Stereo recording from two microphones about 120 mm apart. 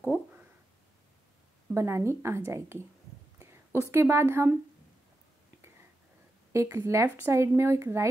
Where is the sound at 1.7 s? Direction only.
20° right (ahead or behind).